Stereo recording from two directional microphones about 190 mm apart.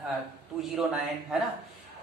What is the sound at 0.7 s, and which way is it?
Speech, 5° right (ahead or behind).